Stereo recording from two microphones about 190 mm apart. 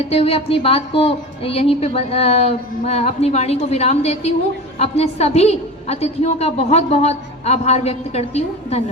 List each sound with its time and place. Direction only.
0.1 s speech: 30° left (ahead or behind)